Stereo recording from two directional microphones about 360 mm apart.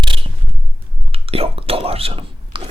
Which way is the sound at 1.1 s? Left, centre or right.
Centre.